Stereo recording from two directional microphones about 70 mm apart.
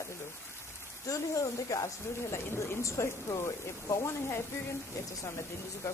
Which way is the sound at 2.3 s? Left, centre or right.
Left.